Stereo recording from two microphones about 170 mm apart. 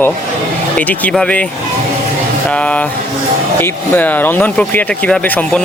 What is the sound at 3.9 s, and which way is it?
Speech, 10° left (ahead or behind).